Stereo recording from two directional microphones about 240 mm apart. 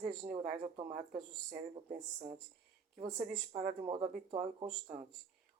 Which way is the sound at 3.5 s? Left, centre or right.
Right.